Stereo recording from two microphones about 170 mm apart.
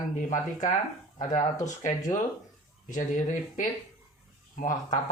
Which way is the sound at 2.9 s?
45° left (ahead or behind).